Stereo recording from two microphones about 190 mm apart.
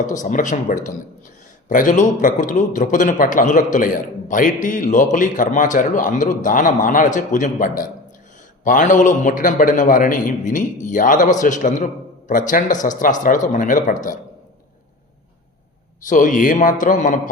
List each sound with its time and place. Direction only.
0.1 s a man's voice: 40° left (ahead or behind)
16.0 s a man's voice: 45° left (ahead or behind)